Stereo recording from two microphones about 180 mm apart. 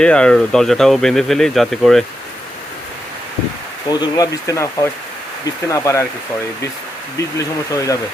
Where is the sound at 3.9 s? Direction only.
20° left (ahead or behind).